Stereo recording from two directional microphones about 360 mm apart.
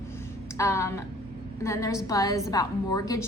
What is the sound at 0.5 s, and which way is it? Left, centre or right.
A woman's voice, centre.